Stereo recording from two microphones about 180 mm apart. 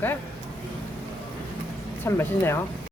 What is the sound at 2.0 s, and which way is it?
Speech, 15° left (ahead or behind).